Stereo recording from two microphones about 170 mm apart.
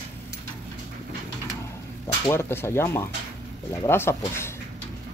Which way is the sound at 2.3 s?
15° left (ahead or behind).